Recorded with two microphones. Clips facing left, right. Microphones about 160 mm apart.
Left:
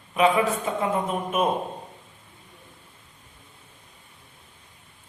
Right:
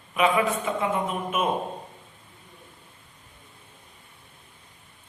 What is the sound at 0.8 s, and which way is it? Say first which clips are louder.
Speech: left 1 dB; 40° left (ahead or behind).